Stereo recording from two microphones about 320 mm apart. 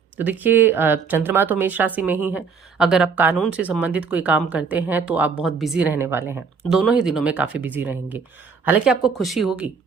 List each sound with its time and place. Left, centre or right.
0.2 s speech: centre